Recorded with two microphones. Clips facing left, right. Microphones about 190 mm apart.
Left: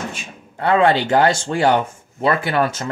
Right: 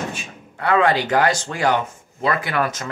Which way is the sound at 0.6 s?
30° left (ahead or behind).